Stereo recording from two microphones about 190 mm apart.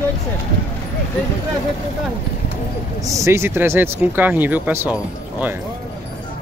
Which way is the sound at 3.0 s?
15° right (ahead or behind).